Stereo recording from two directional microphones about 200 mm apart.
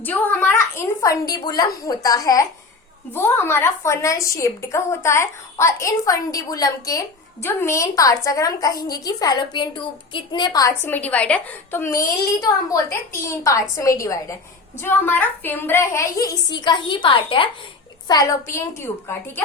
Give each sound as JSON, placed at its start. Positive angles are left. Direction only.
{"t": 0.0, "sound": "a woman's voice", "side_deg": 10}